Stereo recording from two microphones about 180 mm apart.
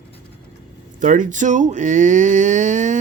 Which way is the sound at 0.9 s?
45° right (ahead or behind).